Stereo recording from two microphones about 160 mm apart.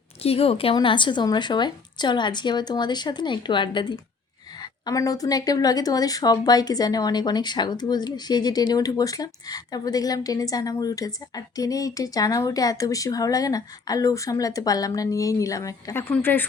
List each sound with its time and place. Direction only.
0.2 s speech: 40° left (ahead or behind); by 16.5 s 10° left (ahead or behind)